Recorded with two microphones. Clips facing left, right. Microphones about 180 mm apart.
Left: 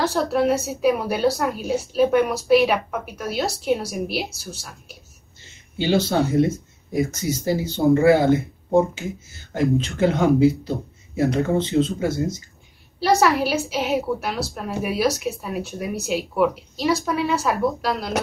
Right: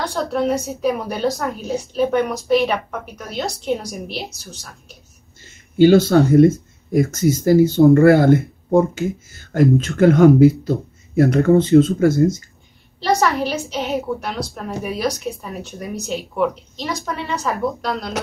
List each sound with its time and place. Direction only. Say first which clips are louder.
0.0 s a woman's voice: left 1 dB; 5° left (ahead or behind)
5.4 s speech: right 14 dB; 50° right (ahead or behind)
13.0 s a woman's voice: even; 5° left (ahead or behind)